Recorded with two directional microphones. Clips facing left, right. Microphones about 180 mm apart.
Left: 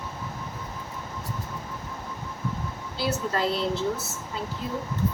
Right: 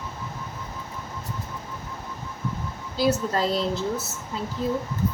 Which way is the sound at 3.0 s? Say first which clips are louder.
Right 4 dB; 40° right (ahead or behind).